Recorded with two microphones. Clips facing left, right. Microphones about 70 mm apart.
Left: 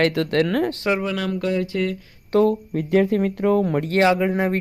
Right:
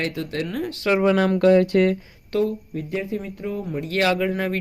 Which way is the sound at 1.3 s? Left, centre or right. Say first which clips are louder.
Right 7 dB; right.